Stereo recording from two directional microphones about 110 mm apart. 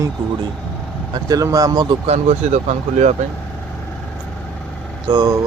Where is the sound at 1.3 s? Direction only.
35° right (ahead or behind).